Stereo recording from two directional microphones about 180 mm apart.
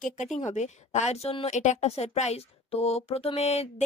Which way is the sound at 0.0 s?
40° left (ahead or behind).